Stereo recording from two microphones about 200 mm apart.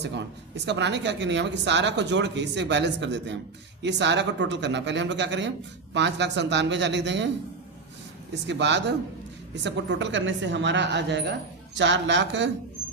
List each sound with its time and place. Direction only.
0.0 s speech: 60° right (ahead or behind)
8.3 s speech: 60° right (ahead or behind)